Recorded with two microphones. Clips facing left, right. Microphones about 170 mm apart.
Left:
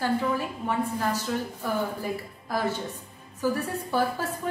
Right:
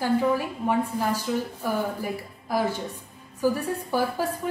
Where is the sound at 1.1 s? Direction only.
10° right (ahead or behind).